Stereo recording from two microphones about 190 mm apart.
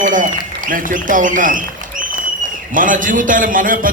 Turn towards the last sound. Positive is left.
turn(degrees=-45)  # may be behind; listen again after turning